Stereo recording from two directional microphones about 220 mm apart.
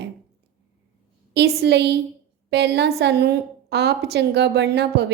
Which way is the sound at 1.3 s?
50° right (ahead or behind).